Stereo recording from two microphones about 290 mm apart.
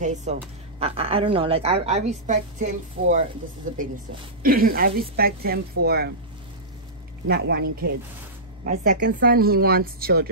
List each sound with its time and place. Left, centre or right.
0.0 s a woman's voice: right
7.2 s a woman's voice: right